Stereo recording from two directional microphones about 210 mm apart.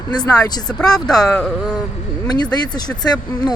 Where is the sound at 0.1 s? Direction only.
20° left (ahead or behind).